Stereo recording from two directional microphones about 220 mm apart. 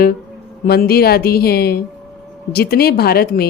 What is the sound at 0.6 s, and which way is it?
Speech, 45° left (ahead or behind).